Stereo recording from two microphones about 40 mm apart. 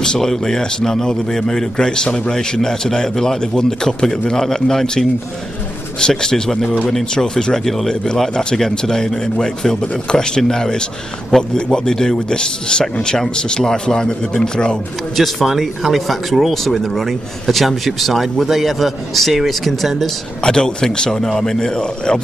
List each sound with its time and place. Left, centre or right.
0.0 s a man's voice: centre
7.3 s speech: centre
7.6 s a man's voice: centre
7.9 s a man's voice: centre
15.1 s speech: centre
20.4 s a man's voice: centre